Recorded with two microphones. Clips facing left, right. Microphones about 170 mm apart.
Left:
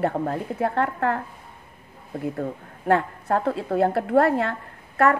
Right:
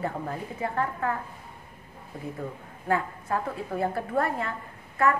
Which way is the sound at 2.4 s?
70° left (ahead or behind).